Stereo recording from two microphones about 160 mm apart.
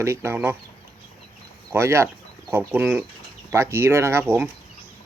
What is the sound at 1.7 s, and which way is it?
Speech, 15° right (ahead or behind).